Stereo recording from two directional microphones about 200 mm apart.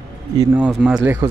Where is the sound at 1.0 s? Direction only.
15° right (ahead or behind).